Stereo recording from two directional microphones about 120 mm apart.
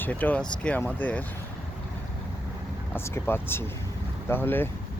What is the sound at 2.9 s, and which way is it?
Speech, 20° left (ahead or behind).